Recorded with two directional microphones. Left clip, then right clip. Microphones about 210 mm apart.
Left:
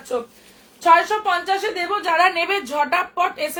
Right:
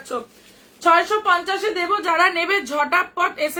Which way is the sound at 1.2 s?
15° right (ahead or behind).